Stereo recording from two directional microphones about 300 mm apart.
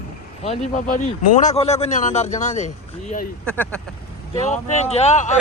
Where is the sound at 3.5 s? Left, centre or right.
Centre.